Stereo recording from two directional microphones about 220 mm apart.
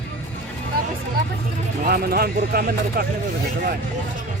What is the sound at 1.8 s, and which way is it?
Speech, 40° right (ahead or behind).